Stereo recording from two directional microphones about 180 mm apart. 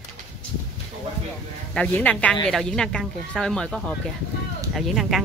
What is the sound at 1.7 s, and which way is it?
A woman's voice, 5° left (ahead or behind).